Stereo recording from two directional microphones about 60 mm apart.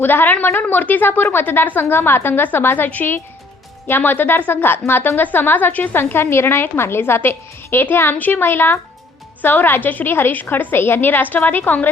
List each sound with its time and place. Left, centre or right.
0.0 s a woman's voice: left